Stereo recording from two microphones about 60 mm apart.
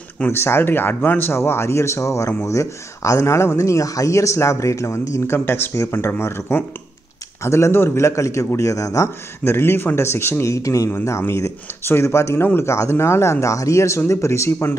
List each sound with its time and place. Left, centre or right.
0.3 s speech: left
5.4 s speech: left
5.8 s speech: left
9.4 s speech: left
10.5 s speech: left
11.1 s speech: left